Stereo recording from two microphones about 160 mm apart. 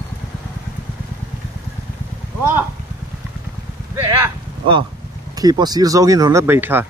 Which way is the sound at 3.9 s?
15° right (ahead or behind).